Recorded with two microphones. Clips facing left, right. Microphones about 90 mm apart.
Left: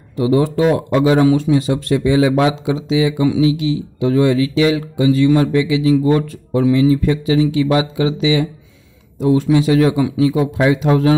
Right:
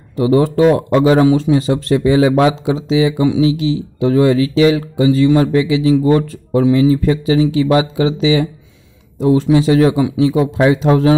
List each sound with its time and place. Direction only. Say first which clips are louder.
0.2 s speech: right 3 dB; 40° right (ahead or behind)